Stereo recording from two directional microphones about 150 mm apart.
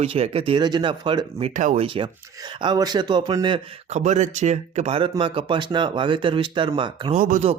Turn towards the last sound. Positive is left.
turn(degrees=-55)  # may be behind; listen again after turning